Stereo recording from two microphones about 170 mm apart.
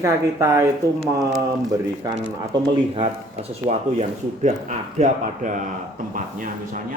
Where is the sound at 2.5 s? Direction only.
35° right (ahead or behind).